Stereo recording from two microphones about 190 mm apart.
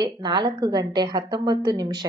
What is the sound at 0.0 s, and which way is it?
A woman's voice, 25° right (ahead or behind).